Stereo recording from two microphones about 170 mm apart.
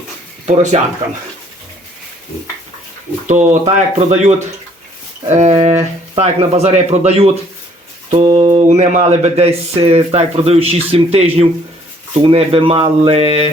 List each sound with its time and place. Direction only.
0.4 s speech: 45° right (ahead or behind)
3.2 s speech: 45° right (ahead or behind)